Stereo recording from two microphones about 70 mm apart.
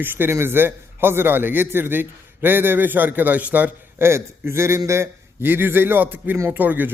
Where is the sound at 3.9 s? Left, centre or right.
Right.